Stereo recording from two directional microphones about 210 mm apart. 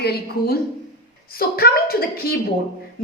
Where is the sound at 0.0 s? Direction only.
50° left (ahead or behind).